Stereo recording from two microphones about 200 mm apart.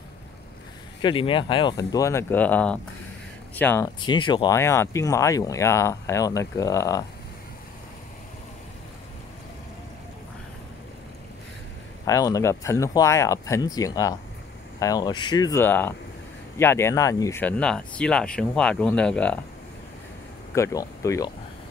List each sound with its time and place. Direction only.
1.0 s speech: 25° left (ahead or behind)
12.1 s speech: 15° left (ahead or behind)
20.5 s speech: 15° left (ahead or behind)